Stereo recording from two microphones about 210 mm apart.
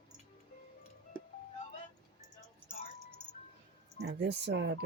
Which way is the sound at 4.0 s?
55° right (ahead or behind).